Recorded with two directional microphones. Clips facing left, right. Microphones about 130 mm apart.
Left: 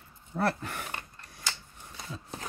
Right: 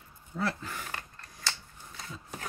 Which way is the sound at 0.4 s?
60° left (ahead or behind).